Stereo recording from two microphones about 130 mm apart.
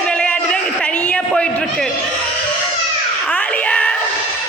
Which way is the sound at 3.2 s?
10° left (ahead or behind).